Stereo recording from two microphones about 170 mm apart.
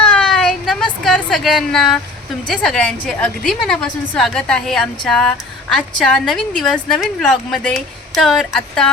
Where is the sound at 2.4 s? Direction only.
Centre (ahead or behind).